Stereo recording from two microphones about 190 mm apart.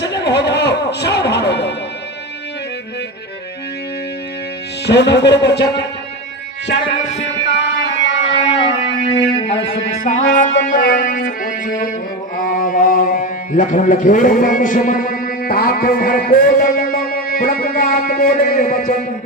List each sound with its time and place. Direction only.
0.0 s music: 65° left (ahead or behind)
4.9 s speech: 65° left (ahead or behind)
6.7 s music: 70° left (ahead or behind)
8.6 s music: 30° left (ahead or behind)
10.0 s music: 45° left (ahead or behind)
12.4 s a sound: 45° left (ahead or behind)